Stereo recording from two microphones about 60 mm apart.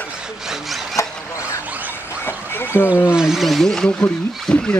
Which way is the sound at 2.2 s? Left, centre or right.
Left.